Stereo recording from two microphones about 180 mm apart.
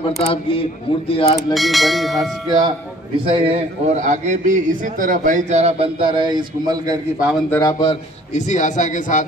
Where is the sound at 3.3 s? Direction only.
35° right (ahead or behind).